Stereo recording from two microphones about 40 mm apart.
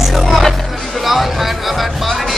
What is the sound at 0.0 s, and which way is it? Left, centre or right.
Music, centre.